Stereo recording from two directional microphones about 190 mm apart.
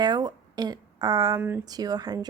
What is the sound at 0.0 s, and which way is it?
A woman's voice, 20° right (ahead or behind).